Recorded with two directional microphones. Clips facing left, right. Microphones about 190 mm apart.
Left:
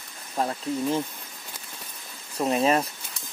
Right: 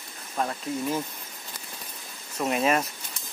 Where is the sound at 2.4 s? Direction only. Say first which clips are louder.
Left 2 dB; 30° left (ahead or behind).